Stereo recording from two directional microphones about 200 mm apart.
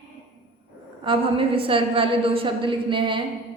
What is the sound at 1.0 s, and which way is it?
A woman's voice, 25° right (ahead or behind).